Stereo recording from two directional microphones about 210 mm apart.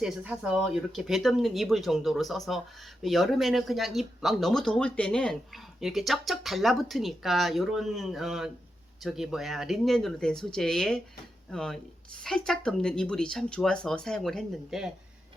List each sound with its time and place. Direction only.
0.0 s speech: 5° right (ahead or behind)